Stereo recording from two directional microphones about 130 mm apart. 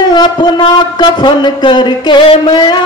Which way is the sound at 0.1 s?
35° left (ahead or behind).